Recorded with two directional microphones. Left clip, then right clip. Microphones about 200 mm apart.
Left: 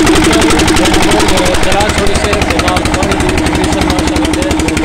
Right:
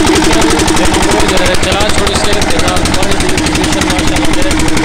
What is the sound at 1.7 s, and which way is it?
Speech, 35° left (ahead or behind).